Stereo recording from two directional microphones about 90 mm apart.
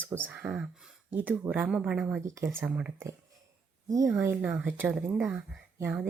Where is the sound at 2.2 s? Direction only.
30° right (ahead or behind).